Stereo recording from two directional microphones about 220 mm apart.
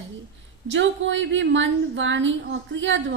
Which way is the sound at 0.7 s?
55° right (ahead or behind).